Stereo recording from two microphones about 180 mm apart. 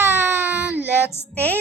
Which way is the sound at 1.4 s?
10° left (ahead or behind).